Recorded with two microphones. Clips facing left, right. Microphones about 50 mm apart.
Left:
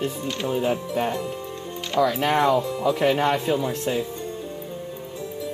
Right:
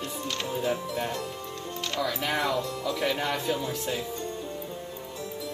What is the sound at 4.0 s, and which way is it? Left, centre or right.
Music, centre.